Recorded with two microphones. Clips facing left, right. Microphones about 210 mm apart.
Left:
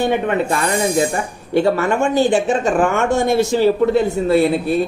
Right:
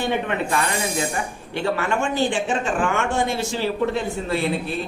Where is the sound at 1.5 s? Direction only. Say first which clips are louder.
Left 8 dB; 45° left (ahead or behind).